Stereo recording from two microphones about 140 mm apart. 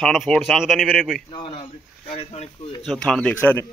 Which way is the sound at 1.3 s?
40° left (ahead or behind).